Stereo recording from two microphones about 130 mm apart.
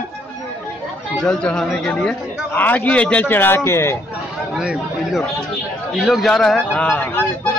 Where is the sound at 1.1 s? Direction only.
5° left (ahead or behind).